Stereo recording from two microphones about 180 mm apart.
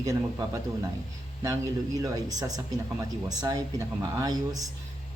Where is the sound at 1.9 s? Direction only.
20° right (ahead or behind).